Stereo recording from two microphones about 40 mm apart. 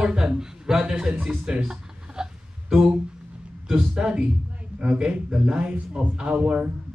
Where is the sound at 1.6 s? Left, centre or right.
Centre.